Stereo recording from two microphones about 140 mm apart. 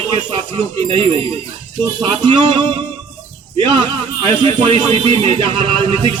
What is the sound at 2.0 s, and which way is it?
A man's voice, 30° right (ahead or behind).